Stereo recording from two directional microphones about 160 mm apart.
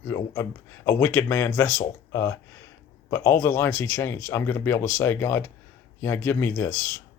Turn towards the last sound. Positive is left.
turn(degrees=15)  # may be behind; listen again after turning